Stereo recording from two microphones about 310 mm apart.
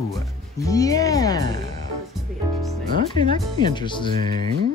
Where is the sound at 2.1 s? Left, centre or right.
Centre.